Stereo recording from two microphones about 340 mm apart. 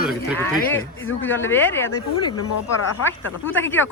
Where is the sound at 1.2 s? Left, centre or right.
Centre.